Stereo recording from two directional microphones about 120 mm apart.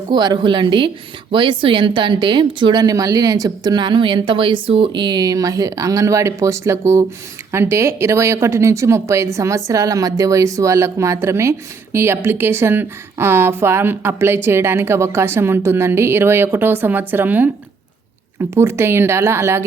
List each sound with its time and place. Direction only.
0.1 s speech: 40° right (ahead or behind); by 19.6 s 20° right (ahead or behind)